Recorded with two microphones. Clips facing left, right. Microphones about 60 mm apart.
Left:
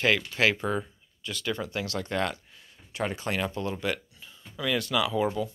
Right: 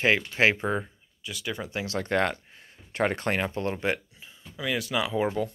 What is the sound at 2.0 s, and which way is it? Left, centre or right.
Speech, right.